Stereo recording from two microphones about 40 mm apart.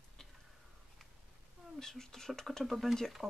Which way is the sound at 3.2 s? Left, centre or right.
Right.